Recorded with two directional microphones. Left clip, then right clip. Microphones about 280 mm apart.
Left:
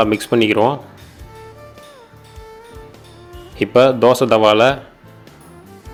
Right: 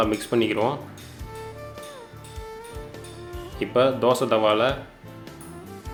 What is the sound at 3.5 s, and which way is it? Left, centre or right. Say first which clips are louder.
Speech: left 9 dB; left.